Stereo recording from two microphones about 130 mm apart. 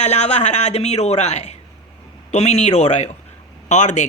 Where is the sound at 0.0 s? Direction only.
60° left (ahead or behind).